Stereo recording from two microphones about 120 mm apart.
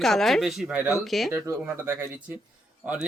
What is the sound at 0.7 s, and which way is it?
Speech, 15° right (ahead or behind).